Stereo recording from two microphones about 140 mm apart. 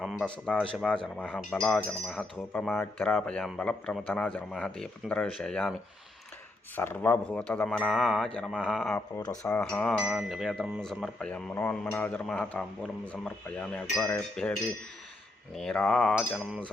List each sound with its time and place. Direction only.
0.0 s speech: centre (ahead or behind)
6.7 s speech: 15° left (ahead or behind); by 8.9 s centre (ahead or behind)
8.9 s speech: 20° left (ahead or behind)
9.6 s speech: 10° left (ahead or behind)
10.0 s speech: 5° right (ahead or behind)